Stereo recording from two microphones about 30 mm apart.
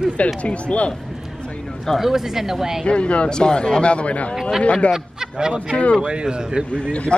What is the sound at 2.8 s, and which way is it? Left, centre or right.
Speech, left.